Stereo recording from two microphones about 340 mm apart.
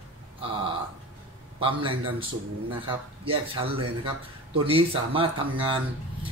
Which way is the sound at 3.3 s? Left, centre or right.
Centre.